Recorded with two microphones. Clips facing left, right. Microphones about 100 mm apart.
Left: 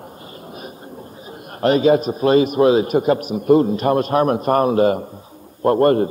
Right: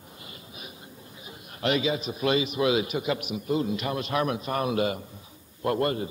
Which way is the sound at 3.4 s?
50° left (ahead or behind).